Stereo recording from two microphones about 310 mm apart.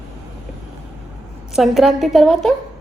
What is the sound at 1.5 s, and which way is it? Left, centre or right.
Speech, centre.